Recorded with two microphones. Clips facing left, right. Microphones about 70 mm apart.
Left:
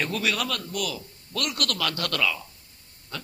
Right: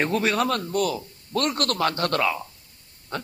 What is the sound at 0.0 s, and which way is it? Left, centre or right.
A man's voice, right.